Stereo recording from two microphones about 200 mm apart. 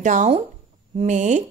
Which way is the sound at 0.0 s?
40° right (ahead or behind).